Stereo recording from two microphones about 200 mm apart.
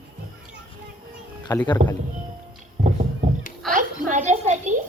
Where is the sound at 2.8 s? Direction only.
40° right (ahead or behind).